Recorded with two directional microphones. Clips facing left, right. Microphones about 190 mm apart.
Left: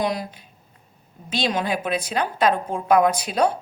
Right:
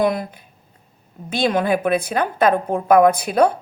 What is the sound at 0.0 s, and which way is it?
Speech, 55° right (ahead or behind).